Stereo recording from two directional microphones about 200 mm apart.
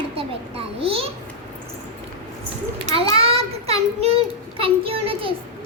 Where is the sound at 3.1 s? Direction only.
30° right (ahead or behind).